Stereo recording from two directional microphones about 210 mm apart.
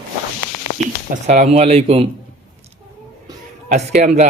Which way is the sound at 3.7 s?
30° right (ahead or behind).